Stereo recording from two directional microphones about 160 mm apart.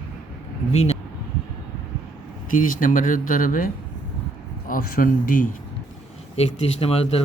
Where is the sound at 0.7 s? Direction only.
40° left (ahead or behind).